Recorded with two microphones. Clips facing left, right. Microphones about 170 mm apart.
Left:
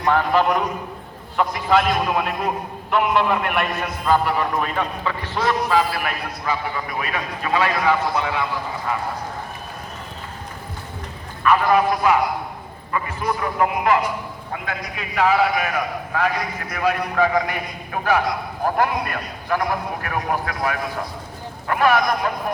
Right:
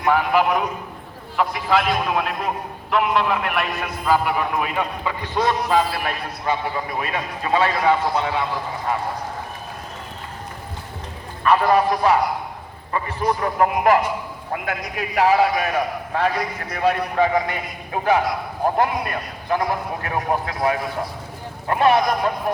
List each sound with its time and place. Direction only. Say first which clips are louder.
0.0 s a man's voice: even; 10° right (ahead or behind); by 8.3 s 30° right (ahead or behind)
11.4 s a man's voice: even; 35° right (ahead or behind)